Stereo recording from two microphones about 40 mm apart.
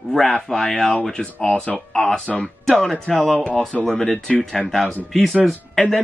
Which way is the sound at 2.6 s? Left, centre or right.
Centre.